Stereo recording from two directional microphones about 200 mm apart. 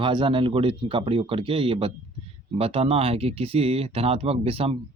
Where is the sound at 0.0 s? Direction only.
25° right (ahead or behind).